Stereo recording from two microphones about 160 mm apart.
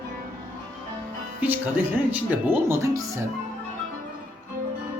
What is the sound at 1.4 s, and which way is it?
Speech, 10° right (ahead or behind).